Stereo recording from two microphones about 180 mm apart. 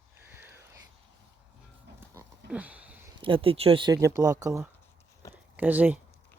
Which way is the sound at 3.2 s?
30° right (ahead or behind).